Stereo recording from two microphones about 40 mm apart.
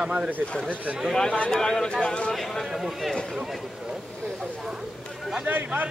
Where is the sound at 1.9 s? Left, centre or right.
Left.